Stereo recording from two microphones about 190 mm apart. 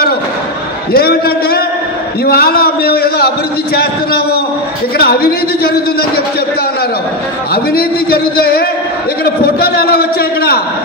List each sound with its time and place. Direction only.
0.9 s a man's voice: 55° left (ahead or behind)
7.5 s a man's voice: 55° left (ahead or behind)